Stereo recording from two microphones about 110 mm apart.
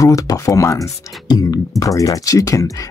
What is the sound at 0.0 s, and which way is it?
Speech, 30° left (ahead or behind).